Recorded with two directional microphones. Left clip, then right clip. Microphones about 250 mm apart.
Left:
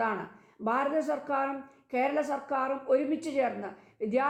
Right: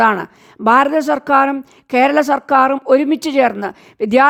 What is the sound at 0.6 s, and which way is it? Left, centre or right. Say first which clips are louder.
A woman's voice: right 17 dB; right.